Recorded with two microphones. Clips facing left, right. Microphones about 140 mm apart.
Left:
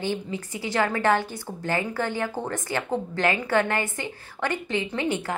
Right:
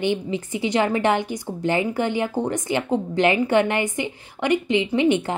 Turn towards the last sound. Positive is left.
turn(degrees=-20)  # may be behind; listen again after turning